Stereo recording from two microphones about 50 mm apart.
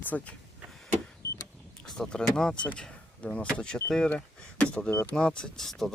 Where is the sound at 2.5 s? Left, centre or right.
Left.